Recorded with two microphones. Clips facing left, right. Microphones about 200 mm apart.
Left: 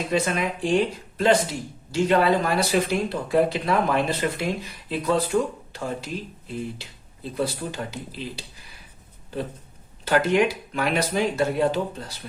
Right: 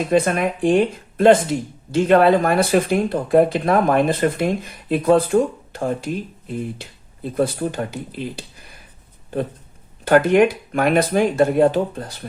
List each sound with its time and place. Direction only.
0.0 s speech: 55° right (ahead or behind)
10.0 s speech: 55° right (ahead or behind)